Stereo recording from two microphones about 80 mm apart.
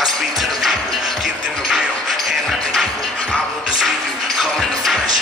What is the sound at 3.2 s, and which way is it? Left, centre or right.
Music, centre.